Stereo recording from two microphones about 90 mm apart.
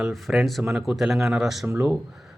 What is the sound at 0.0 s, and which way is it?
A man's voice, 5° right (ahead or behind).